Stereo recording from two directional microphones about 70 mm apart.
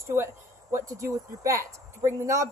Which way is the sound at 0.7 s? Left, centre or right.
Right.